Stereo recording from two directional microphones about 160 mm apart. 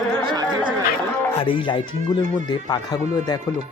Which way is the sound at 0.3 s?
30° right (ahead or behind).